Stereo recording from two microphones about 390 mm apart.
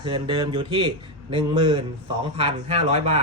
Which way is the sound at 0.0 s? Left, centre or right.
Centre.